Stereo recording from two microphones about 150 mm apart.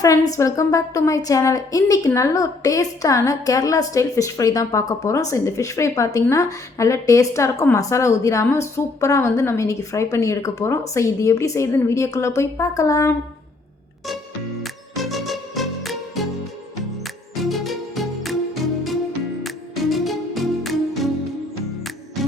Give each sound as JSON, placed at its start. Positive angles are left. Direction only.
{"t": 0.0, "sound": "a woman's voice", "side_deg": 20}
{"t": 14.6, "sound": "music", "side_deg": 0}
{"t": 17.4, "sound": "music", "side_deg": 0}
{"t": 19.4, "sound": "music", "side_deg": 0}